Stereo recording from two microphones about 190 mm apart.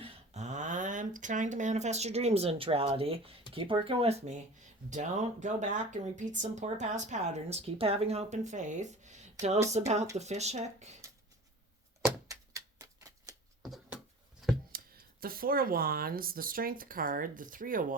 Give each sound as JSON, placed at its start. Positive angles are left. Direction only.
{"t": 0.0, "sound": "speech", "side_deg": -35}
{"t": 12.3, "sound": "typewriter", "side_deg": -15}
{"t": 13.6, "sound": "a sound", "side_deg": 0}
{"t": 14.7, "sound": "speech", "side_deg": -50}